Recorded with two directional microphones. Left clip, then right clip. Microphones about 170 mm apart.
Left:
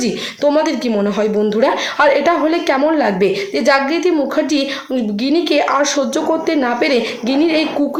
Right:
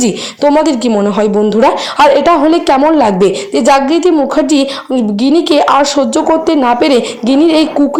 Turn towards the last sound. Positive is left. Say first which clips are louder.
# right 6 dB
turn(degrees=-35)  # may be behind; listen again after turning